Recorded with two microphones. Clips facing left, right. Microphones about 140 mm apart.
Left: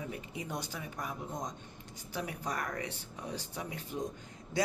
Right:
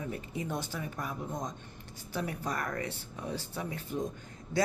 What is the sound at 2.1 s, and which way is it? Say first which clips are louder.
Speech: right 3 dB; 15° left (ahead or behind).